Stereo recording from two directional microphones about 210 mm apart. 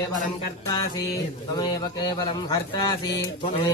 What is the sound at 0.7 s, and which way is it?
Speech, 20° left (ahead or behind).